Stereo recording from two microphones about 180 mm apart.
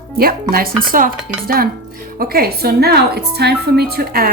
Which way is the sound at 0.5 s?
55° right (ahead or behind).